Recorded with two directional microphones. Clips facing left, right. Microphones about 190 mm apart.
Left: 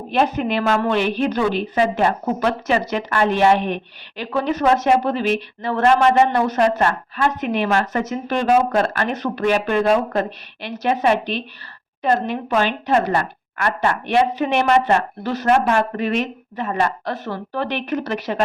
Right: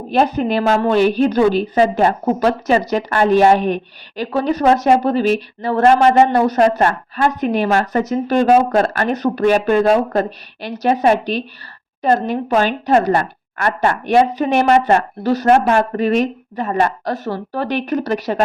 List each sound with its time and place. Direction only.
0.1 s a woman's voice: 35° right (ahead or behind)